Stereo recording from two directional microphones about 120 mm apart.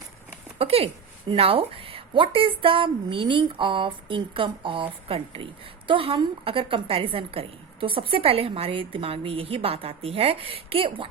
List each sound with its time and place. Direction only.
0.6 s a woman's voice: 55° right (ahead or behind)